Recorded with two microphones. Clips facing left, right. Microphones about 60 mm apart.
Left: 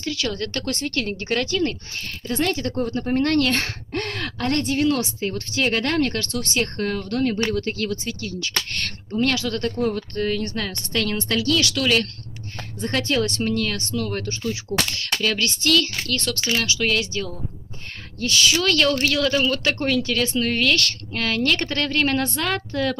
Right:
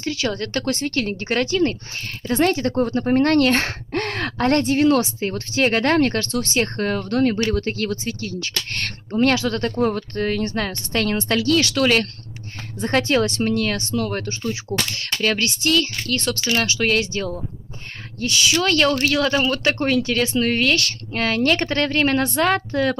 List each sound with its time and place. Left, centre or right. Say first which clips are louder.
0.0 s a woman's voice: right 2 dB; right
6.6 s a woman's voice: right 1 dB; right
12.8 s speech: right 5 dB; right
13.4 s a woman's voice: right 3 dB; right
16.5 s a woman's voice: right 3 dB; right
18.2 s speech: even; centre
18.6 s speech: right 5 dB; centre